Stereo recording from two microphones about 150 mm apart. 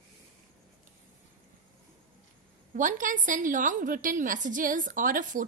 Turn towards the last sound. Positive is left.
turn(degrees=-60)  # may be behind; listen again after turning